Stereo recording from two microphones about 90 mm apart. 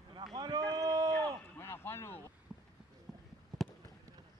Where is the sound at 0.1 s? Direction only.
50° right (ahead or behind).